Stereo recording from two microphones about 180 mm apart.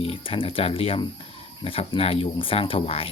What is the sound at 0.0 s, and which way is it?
Speech, 30° left (ahead or behind).